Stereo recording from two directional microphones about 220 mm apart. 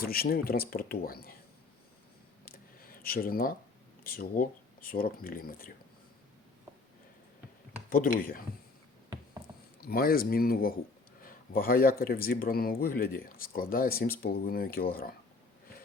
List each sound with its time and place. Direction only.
0.0 s speech: 45° left (ahead or behind)
2.5 s a sound: 40° left (ahead or behind)
4.0 s speech: 40° left (ahead or behind)
7.9 s speech: 40° left (ahead or behind)
9.8 s speech: 40° left (ahead or behind)